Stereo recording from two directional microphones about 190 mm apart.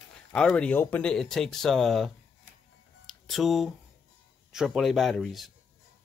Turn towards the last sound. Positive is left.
turn(degrees=0)  # may be behind; listen again after turning